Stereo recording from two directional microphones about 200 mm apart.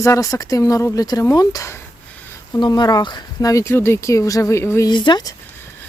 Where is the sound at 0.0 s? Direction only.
15° left (ahead or behind).